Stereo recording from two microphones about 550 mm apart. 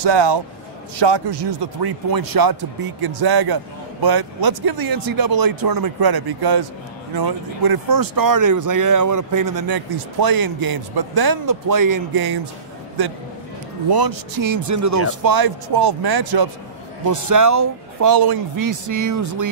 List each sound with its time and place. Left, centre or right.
0.0 s speech: right